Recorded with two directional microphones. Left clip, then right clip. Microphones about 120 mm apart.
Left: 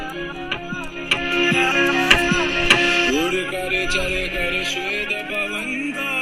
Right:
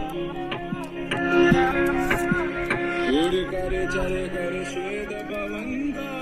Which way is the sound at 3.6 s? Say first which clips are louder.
Left 5 dB; 35° right (ahead or behind).